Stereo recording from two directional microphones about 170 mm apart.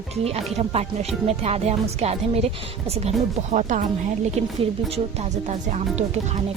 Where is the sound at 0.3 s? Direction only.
35° right (ahead or behind).